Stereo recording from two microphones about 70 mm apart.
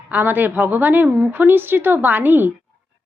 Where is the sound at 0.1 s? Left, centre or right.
Right.